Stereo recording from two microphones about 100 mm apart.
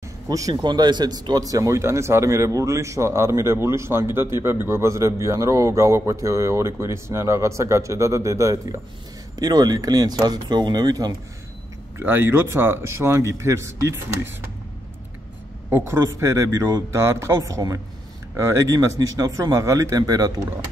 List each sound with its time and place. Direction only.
0.3 s speech: 35° right (ahead or behind)
12.0 s speech: 20° right (ahead or behind)
15.7 s speech: 25° right (ahead or behind)